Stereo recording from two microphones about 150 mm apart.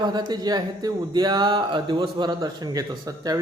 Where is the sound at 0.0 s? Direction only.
30° right (ahead or behind).